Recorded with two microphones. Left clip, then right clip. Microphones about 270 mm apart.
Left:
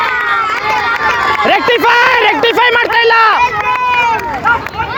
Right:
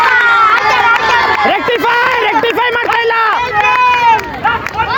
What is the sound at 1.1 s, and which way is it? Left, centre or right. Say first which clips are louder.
Run: right 2 dB; centre.